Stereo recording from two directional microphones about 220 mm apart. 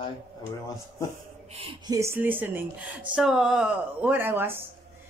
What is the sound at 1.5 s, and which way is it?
A woman's voice, 20° right (ahead or behind).